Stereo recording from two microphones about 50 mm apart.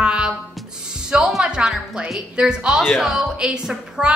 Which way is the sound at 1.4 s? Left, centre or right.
Centre.